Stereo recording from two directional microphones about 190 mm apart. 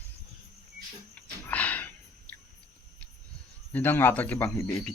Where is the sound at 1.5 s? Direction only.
10° left (ahead or behind).